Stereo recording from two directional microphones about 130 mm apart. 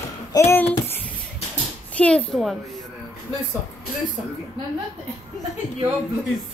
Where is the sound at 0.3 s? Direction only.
20° left (ahead or behind).